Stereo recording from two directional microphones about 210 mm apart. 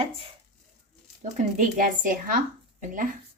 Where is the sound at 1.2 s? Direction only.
35° right (ahead or behind).